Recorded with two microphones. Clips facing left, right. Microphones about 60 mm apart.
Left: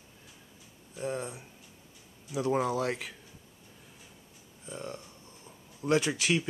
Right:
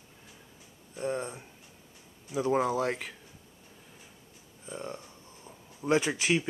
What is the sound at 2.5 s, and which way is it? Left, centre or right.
Speech, centre.